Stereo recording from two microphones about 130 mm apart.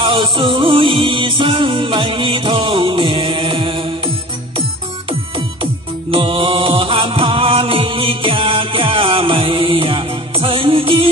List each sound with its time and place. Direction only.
0.0 s music: 40° right (ahead or behind)
6.1 s music: 40° right (ahead or behind)